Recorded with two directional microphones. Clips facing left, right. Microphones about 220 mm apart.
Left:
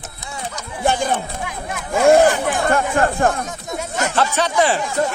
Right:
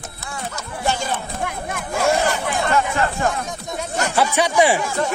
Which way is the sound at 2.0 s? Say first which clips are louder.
Left 8 dB; 50° left (ahead or behind).